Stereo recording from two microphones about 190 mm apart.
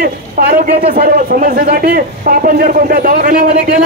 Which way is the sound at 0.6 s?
50° right (ahead or behind).